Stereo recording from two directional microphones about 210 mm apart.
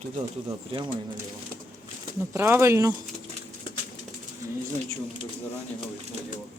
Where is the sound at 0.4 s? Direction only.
25° right (ahead or behind).